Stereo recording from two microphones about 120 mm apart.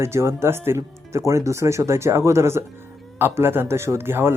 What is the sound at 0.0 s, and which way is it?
Speech, 20° right (ahead or behind).